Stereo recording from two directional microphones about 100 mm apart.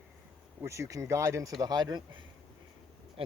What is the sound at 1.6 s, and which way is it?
Speech, 40° right (ahead or behind).